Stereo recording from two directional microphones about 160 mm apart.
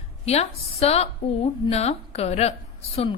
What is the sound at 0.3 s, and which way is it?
A woman's voice, 40° left (ahead or behind).